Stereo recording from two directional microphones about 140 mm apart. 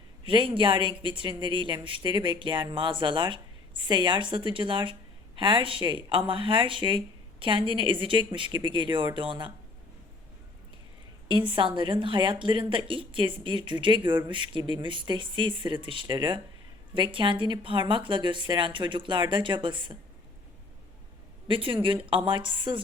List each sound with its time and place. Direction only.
0.3 s speech: 35° right (ahead or behind)
11.3 s speech: 35° right (ahead or behind)
21.4 s speech: 40° right (ahead or behind)